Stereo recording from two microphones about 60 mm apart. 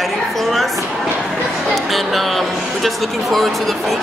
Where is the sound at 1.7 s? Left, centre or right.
Centre.